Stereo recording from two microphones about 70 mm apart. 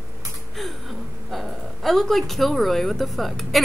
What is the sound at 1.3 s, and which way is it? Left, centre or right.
A woman's voice, centre.